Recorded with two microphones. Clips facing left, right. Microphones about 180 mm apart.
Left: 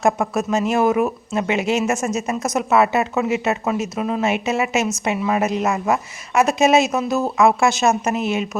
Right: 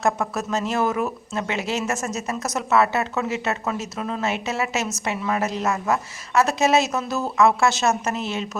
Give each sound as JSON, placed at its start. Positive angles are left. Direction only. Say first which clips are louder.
{"t": 0.0, "sound": "speech", "louder": "left 4 dB", "side_deg": 15}